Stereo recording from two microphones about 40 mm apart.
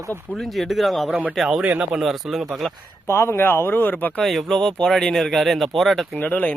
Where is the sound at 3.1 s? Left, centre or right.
Left.